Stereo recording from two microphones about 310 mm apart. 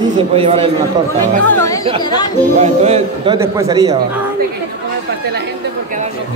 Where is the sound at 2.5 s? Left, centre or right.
Right.